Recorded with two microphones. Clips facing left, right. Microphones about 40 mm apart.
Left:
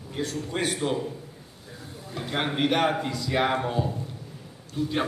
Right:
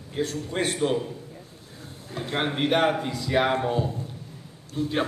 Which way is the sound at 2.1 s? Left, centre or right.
Right.